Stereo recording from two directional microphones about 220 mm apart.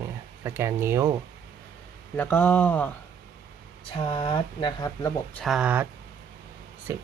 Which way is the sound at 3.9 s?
25° left (ahead or behind).